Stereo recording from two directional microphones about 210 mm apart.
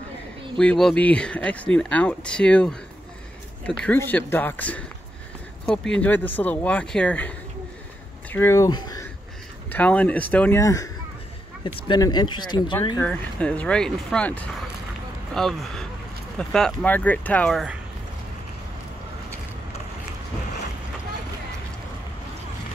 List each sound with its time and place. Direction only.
0.6 s speech: 5° left (ahead or behind); by 9.0 s 20° left (ahead or behind)
9.7 s speech: 5° left (ahead or behind)
13.0 s speech: 5° left (ahead or behind)